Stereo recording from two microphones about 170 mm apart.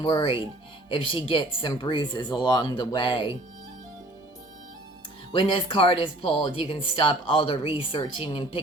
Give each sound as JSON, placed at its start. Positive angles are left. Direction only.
{"t": 0.0, "sound": "speech", "side_deg": 30}
{"t": 5.3, "sound": "speech", "side_deg": 30}